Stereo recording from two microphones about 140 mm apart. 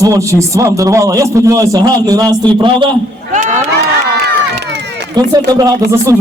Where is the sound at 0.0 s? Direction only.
20° right (ahead or behind).